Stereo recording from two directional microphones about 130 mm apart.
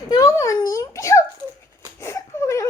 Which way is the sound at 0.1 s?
25° left (ahead or behind).